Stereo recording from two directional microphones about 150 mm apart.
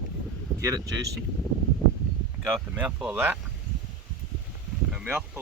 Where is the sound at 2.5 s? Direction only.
10° right (ahead or behind).